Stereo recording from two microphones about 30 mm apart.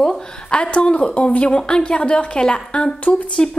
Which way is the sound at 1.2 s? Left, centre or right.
Left.